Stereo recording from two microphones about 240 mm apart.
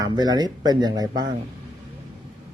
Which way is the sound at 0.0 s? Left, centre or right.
Centre.